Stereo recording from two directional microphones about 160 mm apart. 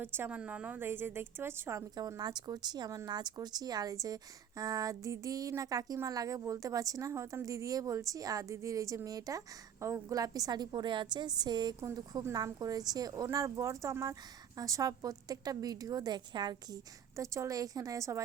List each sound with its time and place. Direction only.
0.0 s a woman's voice: 15° right (ahead or behind)